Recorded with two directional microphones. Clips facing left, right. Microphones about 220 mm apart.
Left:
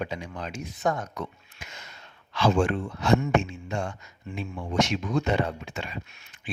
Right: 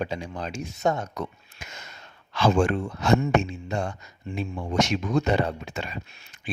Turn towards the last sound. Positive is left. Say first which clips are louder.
# right 1 dB
turn(degrees=-35)  # may be behind; listen again after turning